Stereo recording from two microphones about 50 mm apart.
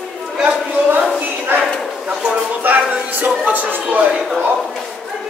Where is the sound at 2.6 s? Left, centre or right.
Right.